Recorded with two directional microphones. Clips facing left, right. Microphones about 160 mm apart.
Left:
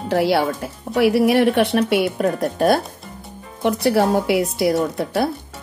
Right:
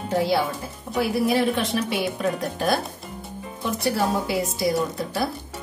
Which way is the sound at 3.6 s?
70° left (ahead or behind).